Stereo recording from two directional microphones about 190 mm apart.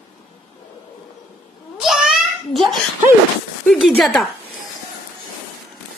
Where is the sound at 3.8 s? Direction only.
Centre (ahead or behind).